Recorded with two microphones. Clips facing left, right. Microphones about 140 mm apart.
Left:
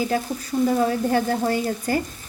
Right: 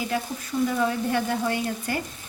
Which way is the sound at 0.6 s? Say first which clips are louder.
Left 4 dB; 40° left (ahead or behind).